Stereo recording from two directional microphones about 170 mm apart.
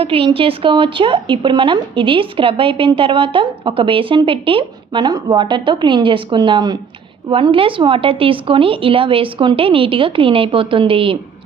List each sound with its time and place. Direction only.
0.0 s a woman's voice: 30° right (ahead or behind)